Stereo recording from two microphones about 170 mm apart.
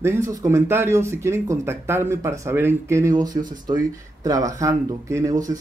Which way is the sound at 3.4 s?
50° right (ahead or behind).